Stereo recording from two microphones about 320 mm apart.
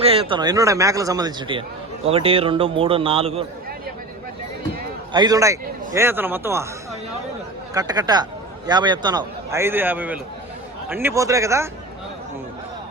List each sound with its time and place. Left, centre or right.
0.0 s speech: centre
5.1 s speech: centre
7.7 s speech: centre